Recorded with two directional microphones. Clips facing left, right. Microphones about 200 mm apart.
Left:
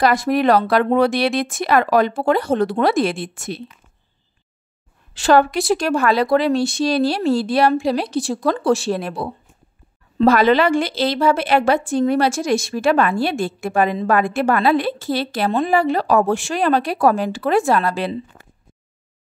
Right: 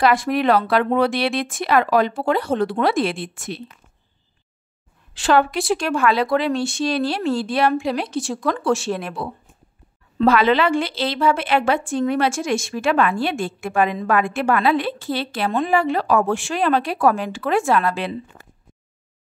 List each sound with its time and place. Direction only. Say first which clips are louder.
0.0 s speech: left 2 dB; 40° left (ahead or behind)
5.1 s a woman's voice: left 3 dB; 40° left (ahead or behind)